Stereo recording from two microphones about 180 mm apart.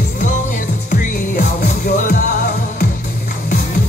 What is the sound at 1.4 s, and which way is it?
Music, 50° left (ahead or behind).